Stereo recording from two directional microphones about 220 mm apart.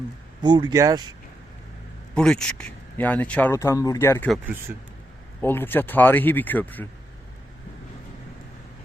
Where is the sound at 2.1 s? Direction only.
5° left (ahead or behind).